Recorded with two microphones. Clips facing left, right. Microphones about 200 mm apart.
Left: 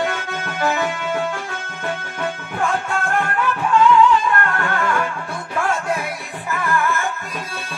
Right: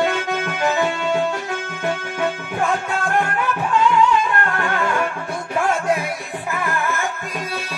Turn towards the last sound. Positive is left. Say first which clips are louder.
# left 2 dB
turn(degrees=-20)  # may be behind; listen again after turning